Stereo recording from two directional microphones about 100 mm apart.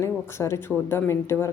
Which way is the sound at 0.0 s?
25° left (ahead or behind).